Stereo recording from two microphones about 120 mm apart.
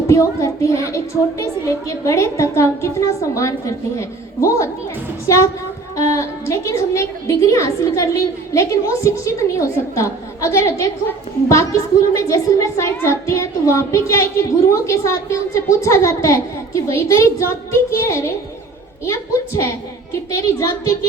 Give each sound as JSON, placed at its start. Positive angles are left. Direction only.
{"t": 0.1, "sound": "a woman's voice", "side_deg": 25}